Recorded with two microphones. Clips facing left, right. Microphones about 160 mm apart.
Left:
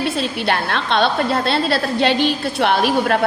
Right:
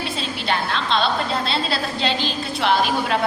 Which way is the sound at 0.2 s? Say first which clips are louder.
Left 4 dB; 60° left (ahead or behind).